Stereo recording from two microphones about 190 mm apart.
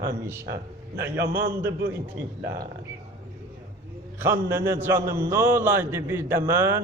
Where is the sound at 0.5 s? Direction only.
15° right (ahead or behind).